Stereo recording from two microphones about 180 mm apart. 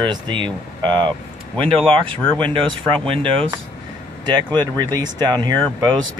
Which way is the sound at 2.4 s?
30° right (ahead or behind).